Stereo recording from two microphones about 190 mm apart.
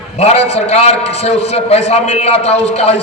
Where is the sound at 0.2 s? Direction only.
35° left (ahead or behind).